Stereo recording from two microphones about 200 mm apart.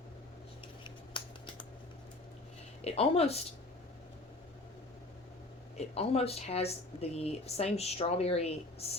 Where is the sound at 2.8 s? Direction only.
30° left (ahead or behind).